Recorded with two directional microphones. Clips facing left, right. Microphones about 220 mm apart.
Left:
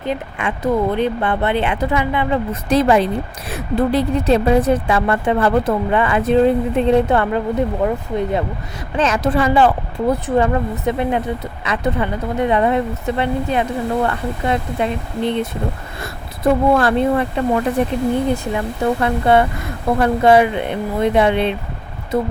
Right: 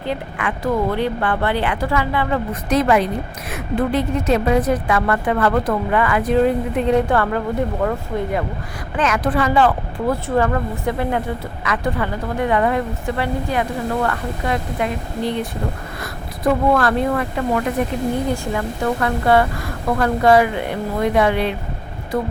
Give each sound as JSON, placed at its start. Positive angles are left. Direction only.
{"t": 0.0, "sound": "a woman's voice", "side_deg": 20}